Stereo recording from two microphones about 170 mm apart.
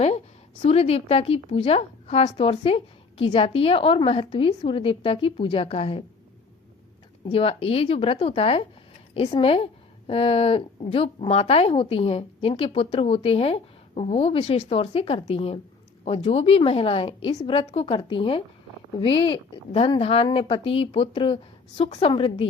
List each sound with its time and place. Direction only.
0.6 s a woman's voice: 35° left (ahead or behind)
7.3 s a woman's voice: 35° left (ahead or behind)